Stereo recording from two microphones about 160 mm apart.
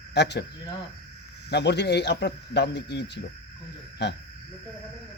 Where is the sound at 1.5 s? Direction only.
90° left.